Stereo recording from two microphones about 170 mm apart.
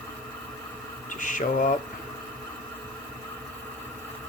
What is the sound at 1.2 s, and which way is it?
Speech, 50° left (ahead or behind).